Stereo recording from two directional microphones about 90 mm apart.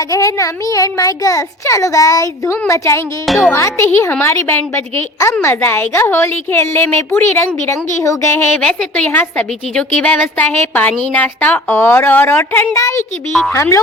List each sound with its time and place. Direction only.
0.1 s a child's voice: 35° left (ahead or behind)